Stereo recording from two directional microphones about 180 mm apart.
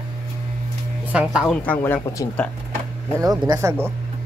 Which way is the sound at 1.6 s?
10° left (ahead or behind).